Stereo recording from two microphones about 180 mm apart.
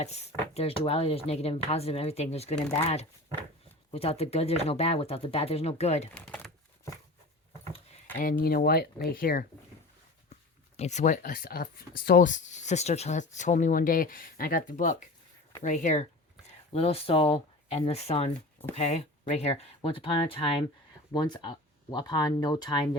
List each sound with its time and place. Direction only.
0.0 s speech: 35° left (ahead or behind)
6.1 s speech: 5° left (ahead or behind)
8.2 s speech: 50° left (ahead or behind)
10.8 s speech: 40° left (ahead or behind)